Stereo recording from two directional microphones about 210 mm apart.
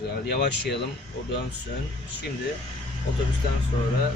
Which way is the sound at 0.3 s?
50° left (ahead or behind).